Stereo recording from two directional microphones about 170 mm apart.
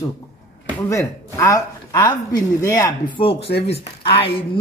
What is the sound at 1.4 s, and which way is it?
A man's voice, 20° left (ahead or behind).